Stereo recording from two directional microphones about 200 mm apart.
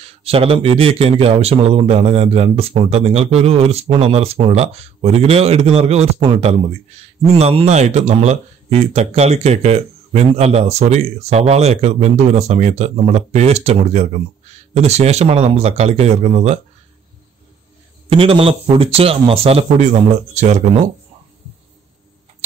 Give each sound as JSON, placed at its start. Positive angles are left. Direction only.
{"t": 0.0, "sound": "speech", "side_deg": -30}
{"t": 18.1, "sound": "speech", "side_deg": -25}